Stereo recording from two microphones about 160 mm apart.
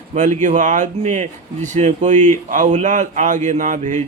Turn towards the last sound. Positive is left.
turn(degrees=-50)  # may be behind; listen again after turning